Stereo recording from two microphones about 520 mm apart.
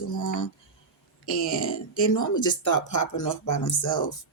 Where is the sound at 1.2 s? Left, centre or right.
Left.